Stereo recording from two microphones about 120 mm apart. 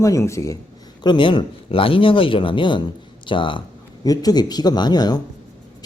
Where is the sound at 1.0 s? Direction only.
40° left (ahead or behind).